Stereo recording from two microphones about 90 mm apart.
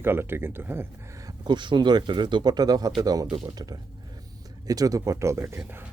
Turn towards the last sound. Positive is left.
turn(degrees=-30)  # may be behind; listen again after turning